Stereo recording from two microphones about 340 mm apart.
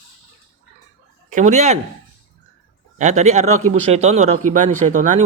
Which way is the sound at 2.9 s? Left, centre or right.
Right.